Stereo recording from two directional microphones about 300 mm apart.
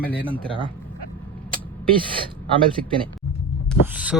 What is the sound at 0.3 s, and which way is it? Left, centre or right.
Speech, centre.